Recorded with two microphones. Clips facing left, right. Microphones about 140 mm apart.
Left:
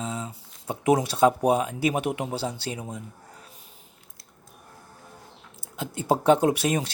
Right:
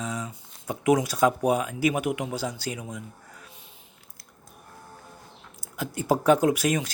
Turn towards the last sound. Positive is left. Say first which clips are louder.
# even
turn(degrees=30)  # may be behind; listen again after turning